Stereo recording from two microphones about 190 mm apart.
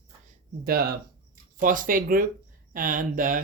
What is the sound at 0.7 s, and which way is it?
Speech, 55° right (ahead or behind).